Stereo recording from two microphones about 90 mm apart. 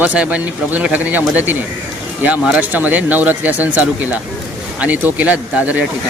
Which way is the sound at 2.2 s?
10° right (ahead or behind).